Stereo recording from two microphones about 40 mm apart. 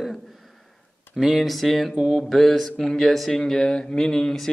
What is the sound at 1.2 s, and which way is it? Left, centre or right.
Speech, centre.